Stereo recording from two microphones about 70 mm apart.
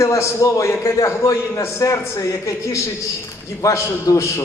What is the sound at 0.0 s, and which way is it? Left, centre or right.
A man's voice, left.